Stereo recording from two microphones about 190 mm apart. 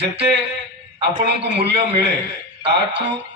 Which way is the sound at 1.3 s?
65° right (ahead or behind).